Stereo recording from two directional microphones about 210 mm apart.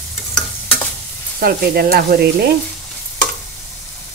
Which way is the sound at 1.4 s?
45° right (ahead or behind).